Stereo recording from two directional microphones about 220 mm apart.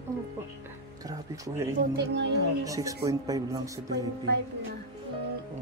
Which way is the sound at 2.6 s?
15° right (ahead or behind).